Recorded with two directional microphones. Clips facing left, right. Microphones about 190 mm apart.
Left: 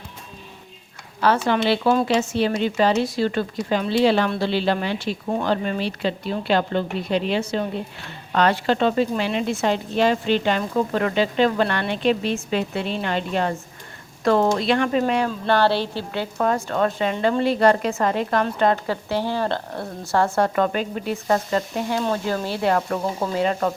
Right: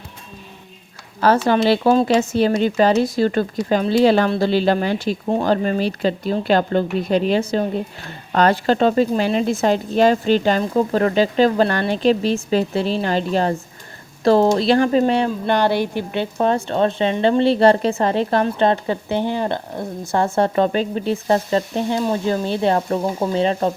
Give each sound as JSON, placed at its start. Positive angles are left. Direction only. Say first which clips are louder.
{"t": 1.5, "sound": "a woman's voice", "louder": "right 4 dB", "side_deg": -40}
{"t": 15.4, "sound": "a woman's voice", "louder": "left 1 dB", "side_deg": -15}